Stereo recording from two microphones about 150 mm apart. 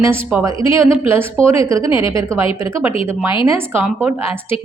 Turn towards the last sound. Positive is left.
turn(degrees=-15)  # may be behind; listen again after turning